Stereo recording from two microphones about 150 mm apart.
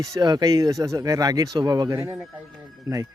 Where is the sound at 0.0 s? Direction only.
25° right (ahead or behind).